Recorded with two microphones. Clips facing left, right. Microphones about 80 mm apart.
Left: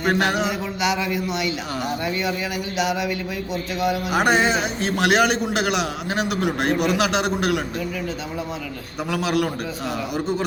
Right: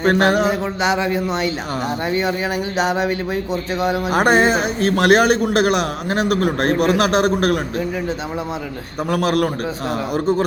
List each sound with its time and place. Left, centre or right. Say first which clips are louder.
0.0 s a sound: right 5 dB; right
3.5 s speech: right 1 dB; right
9.0 s speech: right 4 dB; right